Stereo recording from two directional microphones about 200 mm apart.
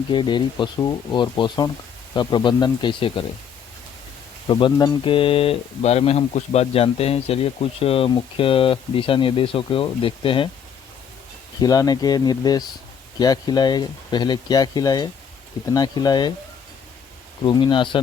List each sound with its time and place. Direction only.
0.1 s speech: 25° left (ahead or behind)
4.4 s speech: 25° left (ahead or behind)
11.6 s speech: 20° left (ahead or behind)
17.4 s speech: 25° left (ahead or behind)